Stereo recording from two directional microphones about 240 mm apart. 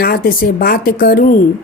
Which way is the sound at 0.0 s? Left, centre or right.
Left.